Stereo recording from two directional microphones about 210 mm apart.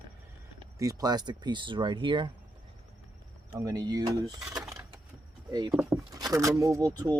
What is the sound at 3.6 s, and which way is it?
Speech, 20° right (ahead or behind).